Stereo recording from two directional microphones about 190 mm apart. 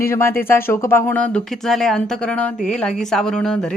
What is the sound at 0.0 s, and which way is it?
Speech, 15° left (ahead or behind).